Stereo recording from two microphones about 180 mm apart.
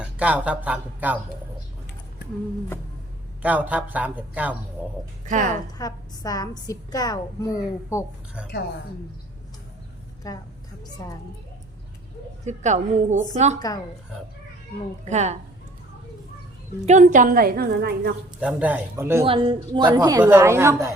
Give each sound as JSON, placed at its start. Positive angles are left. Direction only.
{"t": 0.0, "sound": "speech", "side_deg": -5}
{"t": 3.4, "sound": "speech", "side_deg": -10}
{"t": 5.2, "sound": "a woman's voice", "side_deg": -45}
{"t": 5.7, "sound": "a woman's voice", "side_deg": 20}
{"t": 10.3, "sound": "a woman's voice", "side_deg": 20}
{"t": 12.5, "sound": "a woman's voice", "side_deg": -40}
{"t": 13.6, "sound": "a woman's voice", "side_deg": 20}
{"t": 15.1, "sound": "a woman's voice", "side_deg": -40}
{"t": 16.8, "sound": "a woman's voice", "side_deg": -40}
{"t": 18.3, "sound": "speech", "side_deg": -10}
{"t": 19.2, "sound": "speech", "side_deg": -30}